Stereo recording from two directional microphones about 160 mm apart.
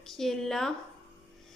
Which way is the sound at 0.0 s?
Centre (ahead or behind).